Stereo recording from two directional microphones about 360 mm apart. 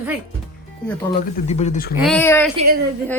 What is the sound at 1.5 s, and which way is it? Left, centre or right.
Speech, centre.